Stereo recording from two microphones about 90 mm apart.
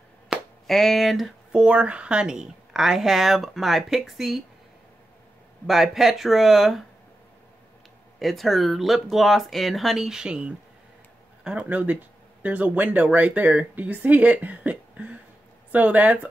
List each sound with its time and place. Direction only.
0.7 s speech: 5° left (ahead or behind)
5.7 s speech: 5° right (ahead or behind)
8.2 s speech: centre (ahead or behind); by 16.3 s 15° right (ahead or behind)